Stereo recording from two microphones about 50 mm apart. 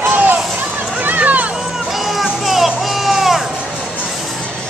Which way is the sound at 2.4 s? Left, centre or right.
Centre.